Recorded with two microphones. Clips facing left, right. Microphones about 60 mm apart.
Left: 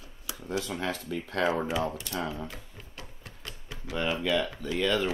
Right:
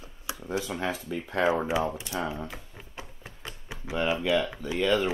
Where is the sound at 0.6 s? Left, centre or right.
Centre.